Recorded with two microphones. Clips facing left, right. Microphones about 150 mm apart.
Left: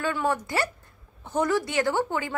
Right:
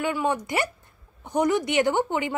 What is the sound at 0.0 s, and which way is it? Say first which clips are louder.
A woman's voice: right 1 dB; 15° right (ahead or behind).